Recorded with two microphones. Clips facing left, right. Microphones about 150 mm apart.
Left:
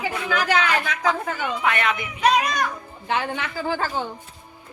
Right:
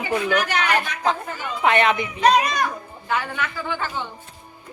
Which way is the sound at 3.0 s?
25° left (ahead or behind).